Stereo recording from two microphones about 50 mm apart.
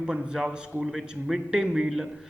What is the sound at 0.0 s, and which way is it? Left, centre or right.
Speech, centre.